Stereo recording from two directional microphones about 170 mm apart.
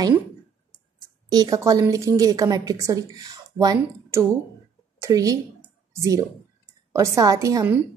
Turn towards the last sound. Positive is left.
turn(degrees=-20)  # may be behind; listen again after turning